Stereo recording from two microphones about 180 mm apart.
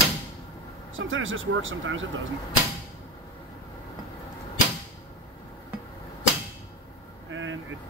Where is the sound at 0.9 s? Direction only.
90° right.